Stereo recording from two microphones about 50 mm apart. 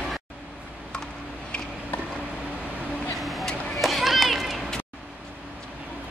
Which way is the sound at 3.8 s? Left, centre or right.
Centre.